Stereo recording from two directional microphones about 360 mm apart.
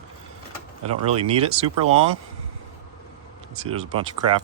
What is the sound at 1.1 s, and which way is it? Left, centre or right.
Speech, centre.